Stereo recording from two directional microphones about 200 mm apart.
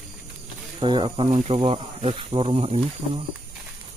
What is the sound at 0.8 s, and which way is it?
Speech, 25° right (ahead or behind).